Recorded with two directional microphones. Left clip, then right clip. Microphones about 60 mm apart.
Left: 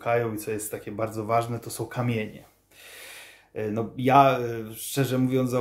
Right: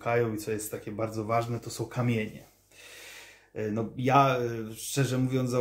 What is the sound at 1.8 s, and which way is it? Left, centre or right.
Speech, left.